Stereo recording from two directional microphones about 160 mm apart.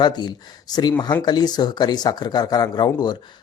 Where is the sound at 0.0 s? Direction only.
25° left (ahead or behind).